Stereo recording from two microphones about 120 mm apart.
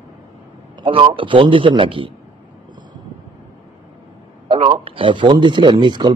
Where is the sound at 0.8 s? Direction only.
45° right (ahead or behind).